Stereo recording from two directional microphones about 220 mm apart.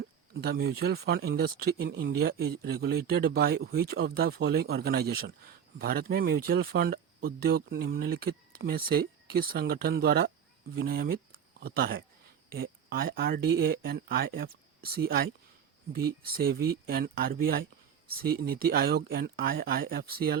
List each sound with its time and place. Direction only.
0.3 s speech: 45° right (ahead or behind)